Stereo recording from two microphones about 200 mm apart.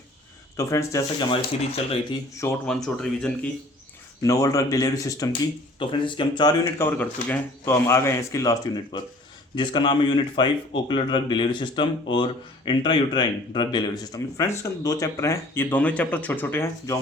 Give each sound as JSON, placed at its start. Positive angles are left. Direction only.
{"t": 0.5, "sound": "speech", "side_deg": 15}
{"t": 1.3, "sound": "speech", "side_deg": 30}
{"t": 2.4, "sound": "speech", "side_deg": 10}
{"t": 4.2, "sound": "speech", "side_deg": 15}